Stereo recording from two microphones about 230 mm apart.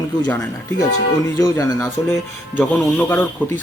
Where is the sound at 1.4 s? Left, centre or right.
Centre.